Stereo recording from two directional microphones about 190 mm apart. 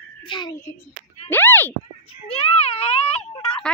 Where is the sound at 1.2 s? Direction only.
10° left (ahead or behind).